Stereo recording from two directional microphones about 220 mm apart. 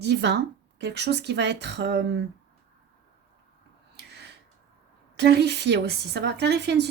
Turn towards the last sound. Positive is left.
turn(degrees=-50)  # may be behind; listen again after turning